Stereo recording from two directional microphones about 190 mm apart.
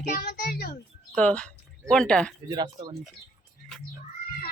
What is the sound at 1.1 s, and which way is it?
Speech, 5° left (ahead or behind).